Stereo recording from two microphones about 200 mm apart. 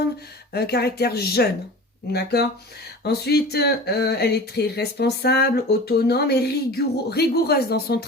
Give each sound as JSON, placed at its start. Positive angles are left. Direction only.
{"t": 0.5, "sound": "speech", "side_deg": 55}